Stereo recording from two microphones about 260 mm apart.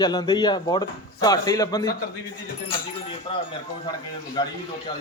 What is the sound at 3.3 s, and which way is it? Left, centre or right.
A man's voice, centre.